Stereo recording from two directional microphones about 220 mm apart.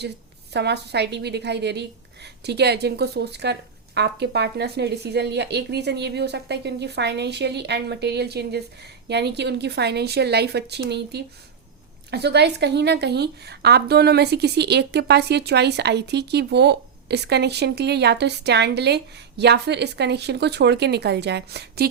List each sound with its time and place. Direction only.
0.5 s a woman's voice: 50° right (ahead or behind)